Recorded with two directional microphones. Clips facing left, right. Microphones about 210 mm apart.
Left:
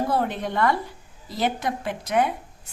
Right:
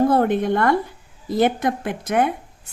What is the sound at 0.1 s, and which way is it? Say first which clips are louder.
A woman's voice: right 7 dB; 55° right (ahead or behind).